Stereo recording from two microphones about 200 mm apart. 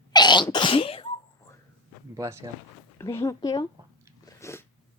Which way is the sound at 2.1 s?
15° right (ahead or behind).